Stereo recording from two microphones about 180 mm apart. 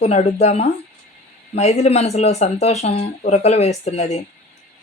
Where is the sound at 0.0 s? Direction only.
40° left (ahead or behind).